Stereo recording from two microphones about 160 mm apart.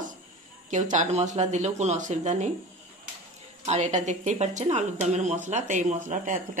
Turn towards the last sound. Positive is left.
turn(degrees=-50)  # may be behind; listen again after turning